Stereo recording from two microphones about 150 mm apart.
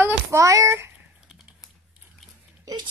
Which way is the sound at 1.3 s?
5° right (ahead or behind).